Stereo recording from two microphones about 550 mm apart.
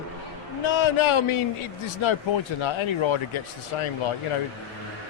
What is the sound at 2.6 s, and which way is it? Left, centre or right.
Speech, left.